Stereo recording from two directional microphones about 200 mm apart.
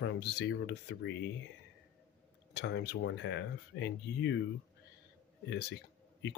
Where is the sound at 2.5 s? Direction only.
60° left (ahead or behind).